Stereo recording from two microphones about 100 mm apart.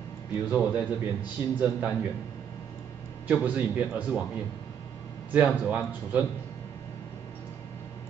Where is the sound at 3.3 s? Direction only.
15° right (ahead or behind).